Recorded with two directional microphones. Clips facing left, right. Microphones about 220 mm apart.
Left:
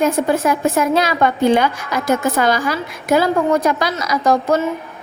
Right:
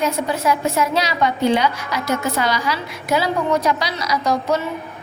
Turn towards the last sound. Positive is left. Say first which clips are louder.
# left 4 dB
turn(degrees=50)  # may be behind; listen again after turning